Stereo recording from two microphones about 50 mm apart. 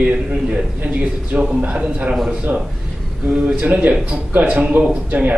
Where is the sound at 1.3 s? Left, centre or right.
Right.